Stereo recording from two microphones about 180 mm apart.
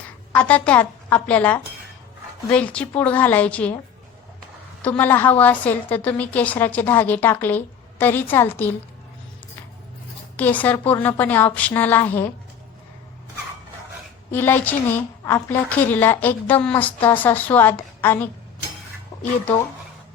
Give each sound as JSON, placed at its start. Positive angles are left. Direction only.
{"t": 0.3, "sound": "a woman's voice", "side_deg": 5}
{"t": 4.8, "sound": "a woman's voice", "side_deg": 10}
{"t": 10.3, "sound": "a woman's voice", "side_deg": 10}
{"t": 14.3, "sound": "a woman's voice", "side_deg": 10}
{"t": 19.1, "sound": "a sound", "side_deg": 20}